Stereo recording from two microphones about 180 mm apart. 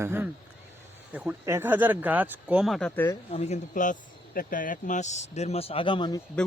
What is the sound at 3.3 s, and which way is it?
Speech, 35° left (ahead or behind).